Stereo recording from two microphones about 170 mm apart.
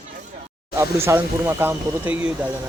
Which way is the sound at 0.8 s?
15° right (ahead or behind).